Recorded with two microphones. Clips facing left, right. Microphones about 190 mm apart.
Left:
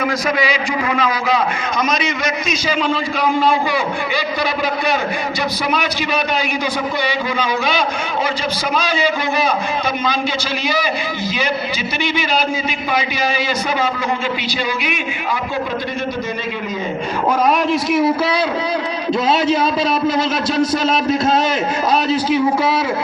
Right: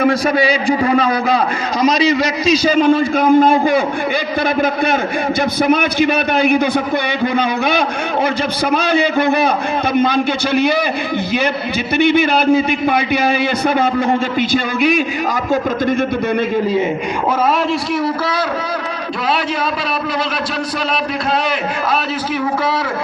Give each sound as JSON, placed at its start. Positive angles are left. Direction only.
{"t": 0.0, "sound": "a man's voice", "side_deg": -30}
{"t": 5.6, "sound": "a man's voice", "side_deg": -55}
{"t": 11.9, "sound": "a man's voice", "side_deg": -60}
{"t": 14.5, "sound": "a man's voice", "side_deg": -45}